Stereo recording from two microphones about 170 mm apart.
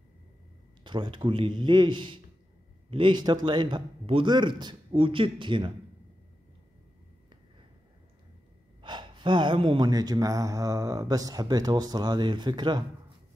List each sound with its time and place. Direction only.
0.8 s speech: 25° right (ahead or behind)
8.8 s speech: 25° right (ahead or behind)